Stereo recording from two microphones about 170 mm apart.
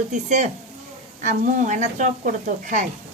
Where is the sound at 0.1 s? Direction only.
45° right (ahead or behind).